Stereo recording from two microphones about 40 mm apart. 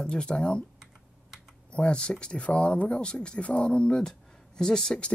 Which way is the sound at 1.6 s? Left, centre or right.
Left.